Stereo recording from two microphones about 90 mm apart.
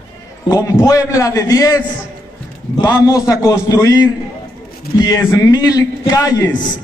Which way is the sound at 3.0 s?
40° left (ahead or behind).